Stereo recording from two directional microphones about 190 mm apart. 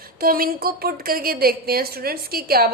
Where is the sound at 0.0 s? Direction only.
50° right (ahead or behind).